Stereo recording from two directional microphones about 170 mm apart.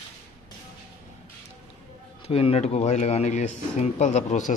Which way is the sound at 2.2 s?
35° left (ahead or behind).